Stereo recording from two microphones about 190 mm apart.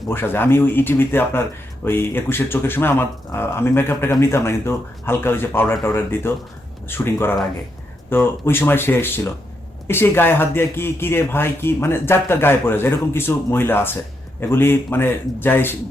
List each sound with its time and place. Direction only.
0.0 s speech: 10° left (ahead or behind)